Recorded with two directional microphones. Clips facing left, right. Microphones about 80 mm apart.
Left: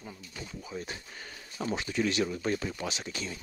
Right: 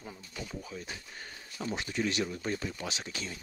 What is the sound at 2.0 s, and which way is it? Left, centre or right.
Speech, left.